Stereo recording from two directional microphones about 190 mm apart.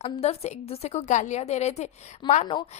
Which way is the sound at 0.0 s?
35° left (ahead or behind).